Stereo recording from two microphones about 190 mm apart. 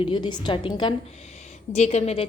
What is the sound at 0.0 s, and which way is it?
Speech, 25° left (ahead or behind).